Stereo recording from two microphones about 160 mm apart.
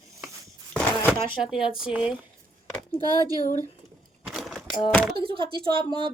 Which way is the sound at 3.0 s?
25° right (ahead or behind).